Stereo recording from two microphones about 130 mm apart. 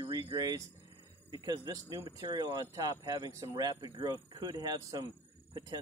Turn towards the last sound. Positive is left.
turn(degrees=-30)  # may be behind; listen again after turning